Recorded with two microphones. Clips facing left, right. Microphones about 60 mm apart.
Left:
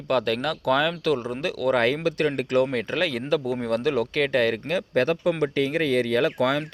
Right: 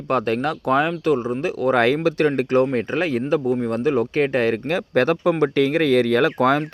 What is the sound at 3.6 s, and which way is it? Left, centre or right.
Speech, centre.